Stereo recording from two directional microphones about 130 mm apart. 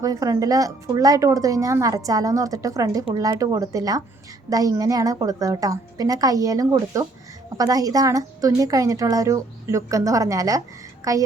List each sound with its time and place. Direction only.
0.0 s a woman's voice: 25° right (ahead or behind)